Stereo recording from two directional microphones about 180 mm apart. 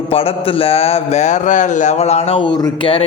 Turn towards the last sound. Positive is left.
turn(degrees=30)  # may be behind; listen again after turning